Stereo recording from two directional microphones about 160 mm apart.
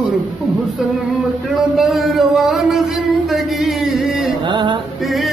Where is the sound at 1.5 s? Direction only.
Centre (ahead or behind).